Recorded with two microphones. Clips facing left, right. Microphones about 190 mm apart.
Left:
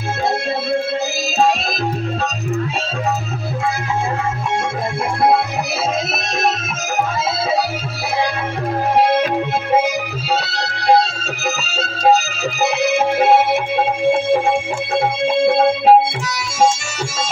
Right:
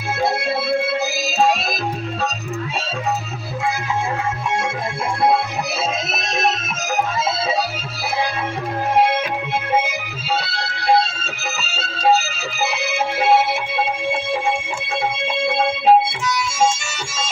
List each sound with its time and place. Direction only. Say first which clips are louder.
9.0 s music: left 4 dB; 35° left (ahead or behind)
10.5 s music: left 3 dB; 40° left (ahead or behind)